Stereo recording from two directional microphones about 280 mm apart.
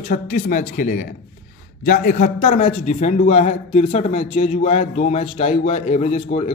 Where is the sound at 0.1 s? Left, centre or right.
Left.